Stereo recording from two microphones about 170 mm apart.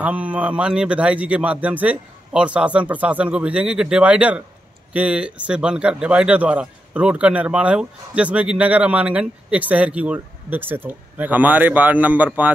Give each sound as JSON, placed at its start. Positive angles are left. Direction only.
{"t": 0.0, "sound": "speech", "side_deg": -10}